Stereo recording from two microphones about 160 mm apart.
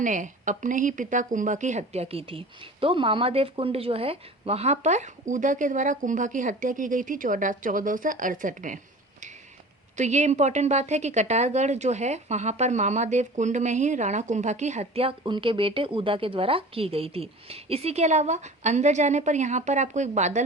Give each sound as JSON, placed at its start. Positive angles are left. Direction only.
{"t": 0.0, "sound": "speech", "side_deg": -50}
{"t": 10.0, "sound": "speech", "side_deg": -45}
{"t": 15.2, "sound": "speech", "side_deg": -30}